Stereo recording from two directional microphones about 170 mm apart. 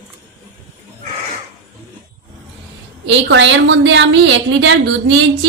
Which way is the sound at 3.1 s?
90° right.